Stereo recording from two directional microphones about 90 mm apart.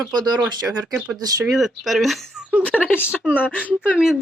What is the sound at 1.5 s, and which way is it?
Speech, centre (ahead or behind).